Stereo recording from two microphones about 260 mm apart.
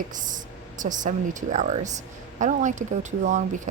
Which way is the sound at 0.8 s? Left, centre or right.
Right.